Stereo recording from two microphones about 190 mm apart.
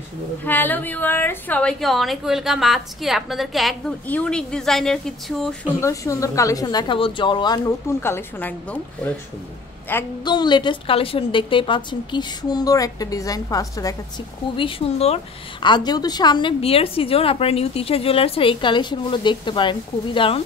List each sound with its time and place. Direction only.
0.5 s a woman's voice: 10° left (ahead or behind)
5.8 s speech: 15° left (ahead or behind)
9.9 s speech: 10° left (ahead or behind)
10.2 s a woman's voice: 25° left (ahead or behind)
14.6 s speech: 35° left (ahead or behind)
15.6 s a woman's voice: 20° left (ahead or behind)